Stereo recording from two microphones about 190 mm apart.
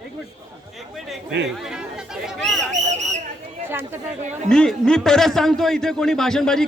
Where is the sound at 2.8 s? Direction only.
40° right (ahead or behind).